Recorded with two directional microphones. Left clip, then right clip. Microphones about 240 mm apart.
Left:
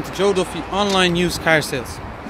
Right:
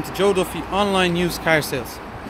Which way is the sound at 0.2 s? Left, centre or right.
Centre.